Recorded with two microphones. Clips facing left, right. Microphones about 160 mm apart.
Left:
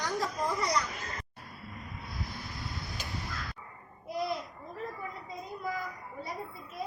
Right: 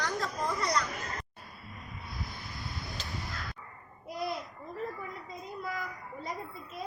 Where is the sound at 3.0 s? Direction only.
Centre (ahead or behind).